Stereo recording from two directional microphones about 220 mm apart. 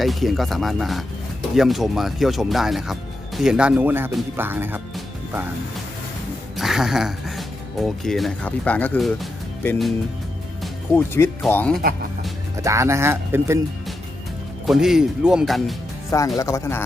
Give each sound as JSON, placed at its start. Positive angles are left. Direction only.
{"t": 0.0, "sound": "speech", "side_deg": 0}
{"t": 6.6, "sound": "speech", "side_deg": 0}
{"t": 10.9, "sound": "speech", "side_deg": 10}
{"t": 12.6, "sound": "speech", "side_deg": -15}
{"t": 14.7, "sound": "speech", "side_deg": 0}
{"t": 16.0, "sound": "speech", "side_deg": 15}